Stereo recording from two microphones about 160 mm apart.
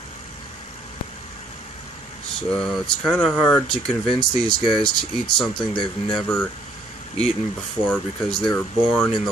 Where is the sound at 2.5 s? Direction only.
Centre (ahead or behind).